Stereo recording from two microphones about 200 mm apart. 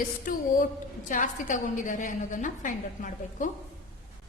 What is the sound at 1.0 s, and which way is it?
A woman's voice, 40° left (ahead or behind).